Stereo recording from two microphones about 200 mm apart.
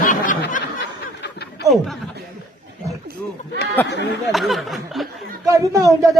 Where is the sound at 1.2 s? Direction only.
55° left (ahead or behind).